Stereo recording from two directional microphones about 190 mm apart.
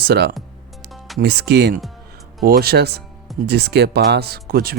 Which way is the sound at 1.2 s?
60° right (ahead or behind).